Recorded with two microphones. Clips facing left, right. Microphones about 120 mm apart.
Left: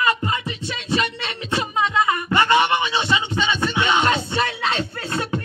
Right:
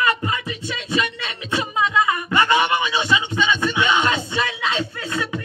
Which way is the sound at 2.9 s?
30° left (ahead or behind).